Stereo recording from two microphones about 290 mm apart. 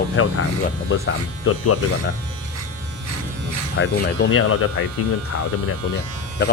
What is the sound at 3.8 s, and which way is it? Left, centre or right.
Speech, left.